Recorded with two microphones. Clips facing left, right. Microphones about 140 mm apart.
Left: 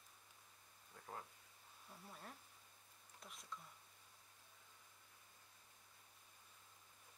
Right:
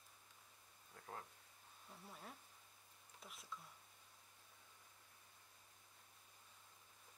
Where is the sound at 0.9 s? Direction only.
5° left (ahead or behind).